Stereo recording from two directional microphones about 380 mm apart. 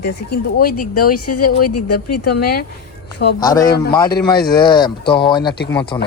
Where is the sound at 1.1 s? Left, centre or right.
Left.